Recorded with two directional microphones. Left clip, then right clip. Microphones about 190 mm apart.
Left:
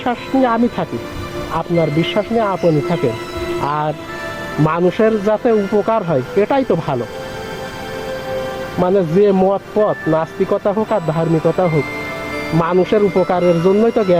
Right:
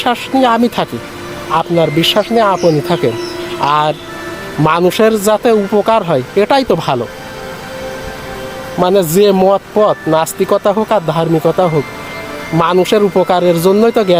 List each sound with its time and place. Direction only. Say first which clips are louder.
0.0 s speech: right 5 dB; 25° right (ahead or behind)
8.8 s speech: right 4 dB; 25° right (ahead or behind)